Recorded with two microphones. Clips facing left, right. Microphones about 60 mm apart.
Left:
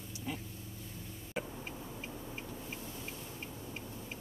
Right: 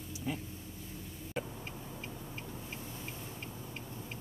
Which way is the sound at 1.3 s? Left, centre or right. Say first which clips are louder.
Even; centre.